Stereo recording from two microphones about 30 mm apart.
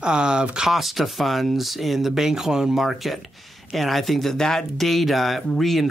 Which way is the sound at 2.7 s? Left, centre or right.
Centre.